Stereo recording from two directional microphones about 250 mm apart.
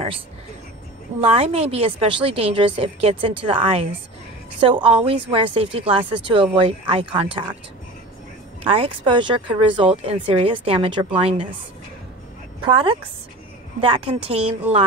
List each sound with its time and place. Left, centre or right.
1.2 s speech: right
8.6 s speech: right
12.6 s speech: right